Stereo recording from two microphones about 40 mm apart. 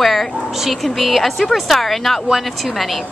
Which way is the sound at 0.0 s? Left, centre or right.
Centre.